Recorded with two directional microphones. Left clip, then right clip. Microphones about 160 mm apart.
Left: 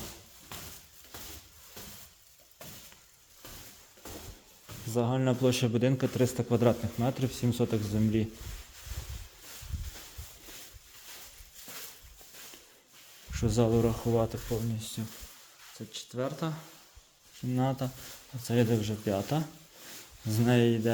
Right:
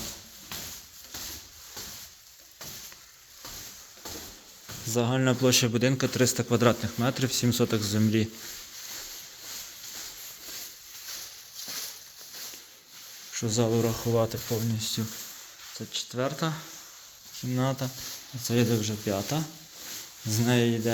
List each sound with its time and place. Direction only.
4.9 s speech: 5° left (ahead or behind)
13.3 s speech: 35° left (ahead or behind)
13.7 s speech: 20° left (ahead or behind)
14.5 s speech: 5° right (ahead or behind)
17.5 s speech: 20° left (ahead or behind)